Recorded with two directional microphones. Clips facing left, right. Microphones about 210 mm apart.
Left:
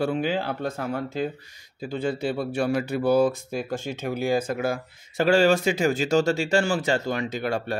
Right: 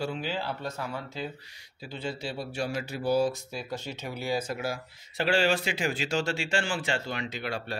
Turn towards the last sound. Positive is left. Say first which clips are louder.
# left 7 dB
turn(degrees=45)  # may be behind; listen again after turning